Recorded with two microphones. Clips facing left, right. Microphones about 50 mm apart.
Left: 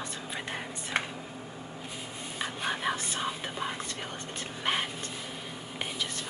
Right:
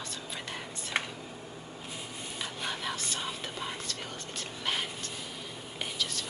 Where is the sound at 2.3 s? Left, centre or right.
Left.